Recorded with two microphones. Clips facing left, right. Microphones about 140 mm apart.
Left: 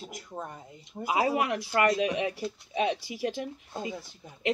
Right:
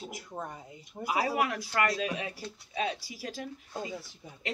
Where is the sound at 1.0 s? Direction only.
20° left (ahead or behind).